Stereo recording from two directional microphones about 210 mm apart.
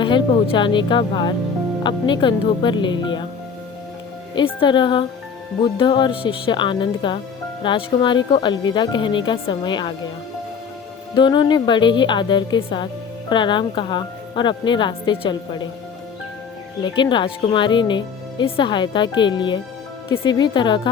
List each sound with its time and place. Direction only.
0.0 s speech: 20° left (ahead or behind)
4.4 s speech: 20° left (ahead or behind)
11.1 s speech: 20° left (ahead or behind)
16.8 s speech: 20° left (ahead or behind)